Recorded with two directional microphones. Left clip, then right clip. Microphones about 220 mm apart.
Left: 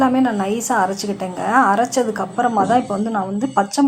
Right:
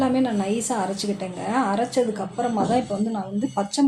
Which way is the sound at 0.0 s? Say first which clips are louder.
Left 6 dB; 15° left (ahead or behind).